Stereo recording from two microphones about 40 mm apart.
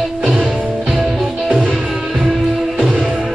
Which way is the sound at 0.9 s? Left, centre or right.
Centre.